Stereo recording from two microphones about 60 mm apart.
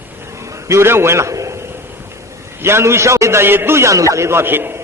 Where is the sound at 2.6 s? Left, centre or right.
Right.